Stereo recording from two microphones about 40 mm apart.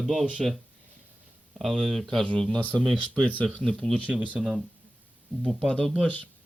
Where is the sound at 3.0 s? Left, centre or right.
Right.